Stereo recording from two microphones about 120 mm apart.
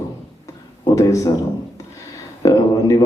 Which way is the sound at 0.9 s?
25° left (ahead or behind).